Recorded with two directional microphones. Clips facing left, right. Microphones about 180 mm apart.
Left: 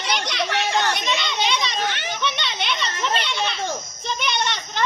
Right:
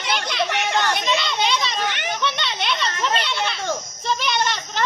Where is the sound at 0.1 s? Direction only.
Centre (ahead or behind).